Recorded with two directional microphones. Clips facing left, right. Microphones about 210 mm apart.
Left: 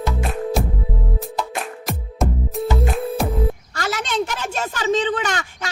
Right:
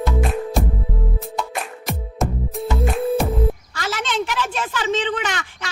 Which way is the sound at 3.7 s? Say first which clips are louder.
Left 1 dB; 40° left (ahead or behind).